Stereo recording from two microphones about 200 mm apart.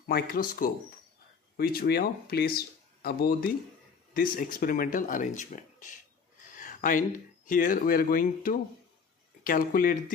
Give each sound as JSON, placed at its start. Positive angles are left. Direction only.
{"t": 0.0, "sound": "speech", "side_deg": 45}